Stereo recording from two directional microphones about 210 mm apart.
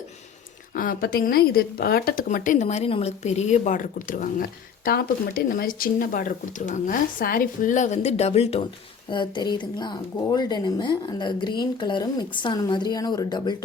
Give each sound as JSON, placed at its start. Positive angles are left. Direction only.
{"t": 0.7, "sound": "speech", "side_deg": 45}